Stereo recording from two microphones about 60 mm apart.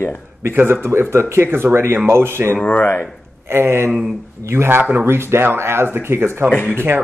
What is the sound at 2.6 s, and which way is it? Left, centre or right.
Speech, left.